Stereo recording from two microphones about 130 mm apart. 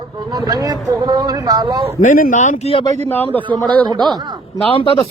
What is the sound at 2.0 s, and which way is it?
Speech, 90° left.